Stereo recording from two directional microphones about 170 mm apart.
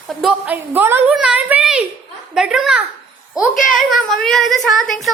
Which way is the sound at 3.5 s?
50° left (ahead or behind).